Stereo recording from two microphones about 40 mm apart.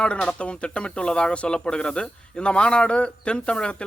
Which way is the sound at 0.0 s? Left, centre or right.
Left.